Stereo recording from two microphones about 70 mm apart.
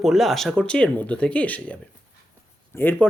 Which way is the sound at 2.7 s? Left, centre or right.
Left.